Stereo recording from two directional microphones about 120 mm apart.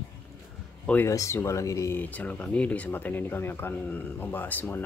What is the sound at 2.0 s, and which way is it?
Speech, 15° left (ahead or behind).